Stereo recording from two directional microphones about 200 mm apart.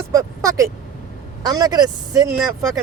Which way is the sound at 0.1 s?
15° right (ahead or behind).